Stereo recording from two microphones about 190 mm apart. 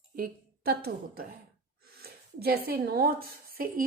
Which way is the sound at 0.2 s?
50° right (ahead or behind).